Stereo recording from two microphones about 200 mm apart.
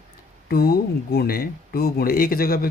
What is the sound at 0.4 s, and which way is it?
Speech, 50° left (ahead or behind).